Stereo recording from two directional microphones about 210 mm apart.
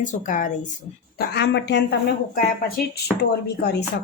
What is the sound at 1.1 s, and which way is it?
Speech, 50° left (ahead or behind).